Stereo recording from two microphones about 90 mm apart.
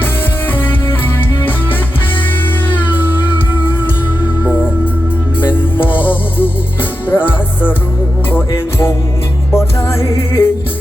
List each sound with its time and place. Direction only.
2.6 s music: 20° left (ahead or behind)
7.1 s music: 20° left (ahead or behind)